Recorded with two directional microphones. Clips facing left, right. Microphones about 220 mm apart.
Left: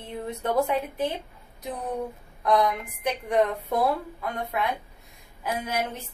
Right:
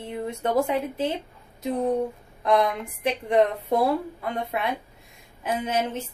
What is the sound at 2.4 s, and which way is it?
Speech, 20° right (ahead or behind).